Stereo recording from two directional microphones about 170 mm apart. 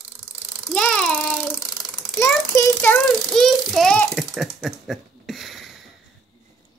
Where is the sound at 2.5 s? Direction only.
15° left (ahead or behind).